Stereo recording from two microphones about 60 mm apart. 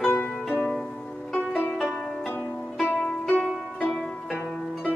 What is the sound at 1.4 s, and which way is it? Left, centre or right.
Pizzicato, left.